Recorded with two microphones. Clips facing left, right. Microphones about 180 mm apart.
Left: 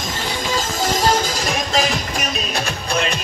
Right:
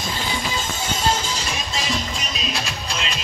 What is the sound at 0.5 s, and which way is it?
Music, 90° left.